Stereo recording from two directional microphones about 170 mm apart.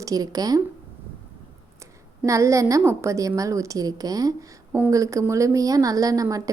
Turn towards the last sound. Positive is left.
turn(degrees=-20)  # may be behind; listen again after turning